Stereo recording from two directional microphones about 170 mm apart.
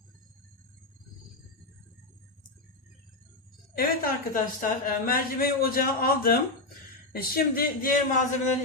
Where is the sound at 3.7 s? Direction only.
55° left (ahead or behind).